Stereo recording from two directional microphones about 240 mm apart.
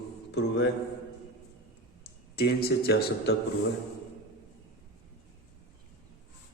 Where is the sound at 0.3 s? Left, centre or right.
Left.